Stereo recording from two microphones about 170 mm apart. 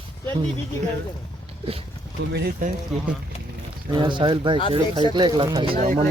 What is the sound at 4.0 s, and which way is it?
Speech, 30° right (ahead or behind).